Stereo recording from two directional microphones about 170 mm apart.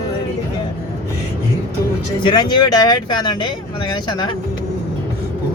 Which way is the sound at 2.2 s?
25° left (ahead or behind).